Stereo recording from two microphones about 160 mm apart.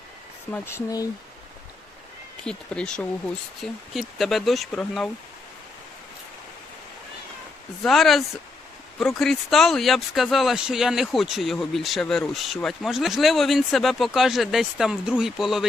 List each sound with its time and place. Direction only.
0.5 s speech: 15° left (ahead or behind)
2.4 s speech: 5° left (ahead or behind)
7.9 s speech: centre (ahead or behind)